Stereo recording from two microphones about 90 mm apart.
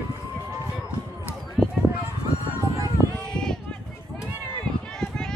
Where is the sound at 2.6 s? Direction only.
35° right (ahead or behind).